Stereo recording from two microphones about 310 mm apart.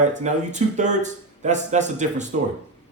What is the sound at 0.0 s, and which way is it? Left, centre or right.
Speech, right.